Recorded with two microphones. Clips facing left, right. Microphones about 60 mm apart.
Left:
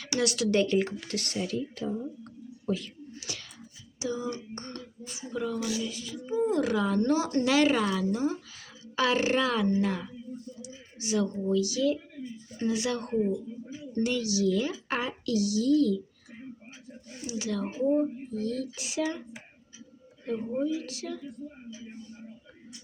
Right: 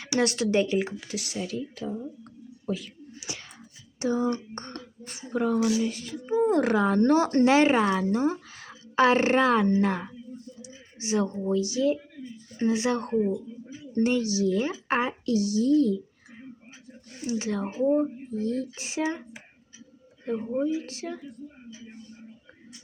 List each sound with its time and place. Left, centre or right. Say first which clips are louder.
0.0 s speech: right 3 dB; right
0.4 s speech: right 1 dB; centre
3.2 s whispering: right 2 dB; right
4.0 s speech: right 7 dB; right
10.6 s a sound: right 1 dB; right
11.4 s speech: right 1 dB; right
17.2 s speech: right 3 dB; right